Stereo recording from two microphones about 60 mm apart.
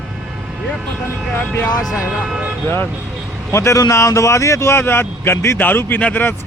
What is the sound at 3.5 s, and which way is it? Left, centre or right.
Speech, left.